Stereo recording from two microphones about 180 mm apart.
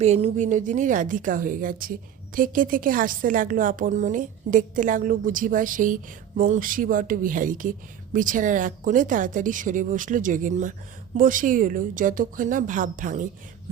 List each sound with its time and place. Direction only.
0.0 s a woman's voice: 35° right (ahead or behind)